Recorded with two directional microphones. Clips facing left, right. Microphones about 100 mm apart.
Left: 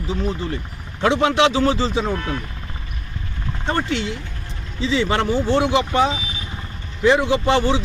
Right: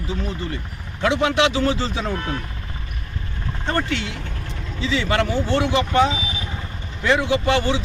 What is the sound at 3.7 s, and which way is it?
Speech, 20° left (ahead or behind).